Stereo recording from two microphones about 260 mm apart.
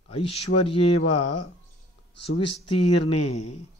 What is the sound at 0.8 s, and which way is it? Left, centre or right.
Speech, left.